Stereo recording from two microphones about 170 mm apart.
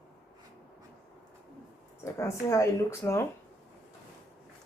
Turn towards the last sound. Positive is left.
turn(degrees=15)  # may be behind; listen again after turning